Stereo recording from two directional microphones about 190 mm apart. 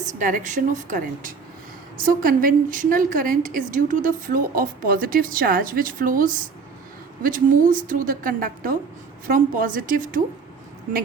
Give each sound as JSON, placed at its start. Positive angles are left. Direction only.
{"t": 0.0, "sound": "a woman's voice", "side_deg": -40}